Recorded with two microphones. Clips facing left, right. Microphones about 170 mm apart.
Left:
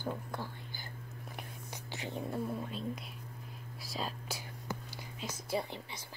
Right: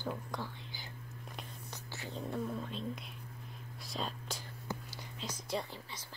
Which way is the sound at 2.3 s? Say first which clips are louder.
Right 1 dB; 10° left (ahead or behind).